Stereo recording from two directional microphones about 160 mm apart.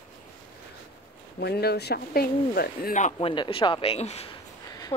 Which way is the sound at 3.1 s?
30° left (ahead or behind).